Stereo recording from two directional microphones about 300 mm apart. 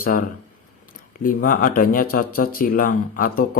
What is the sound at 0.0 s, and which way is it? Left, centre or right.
Speech, left.